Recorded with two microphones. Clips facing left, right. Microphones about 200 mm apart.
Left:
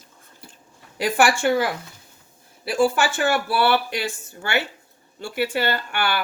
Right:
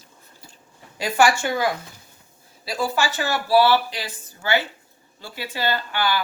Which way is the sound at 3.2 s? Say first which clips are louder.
Right 4 dB; 55° left (ahead or behind).